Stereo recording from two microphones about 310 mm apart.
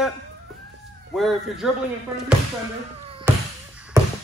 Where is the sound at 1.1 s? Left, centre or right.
Centre.